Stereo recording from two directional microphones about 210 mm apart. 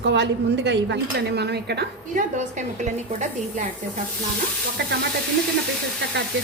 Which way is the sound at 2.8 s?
35° right (ahead or behind).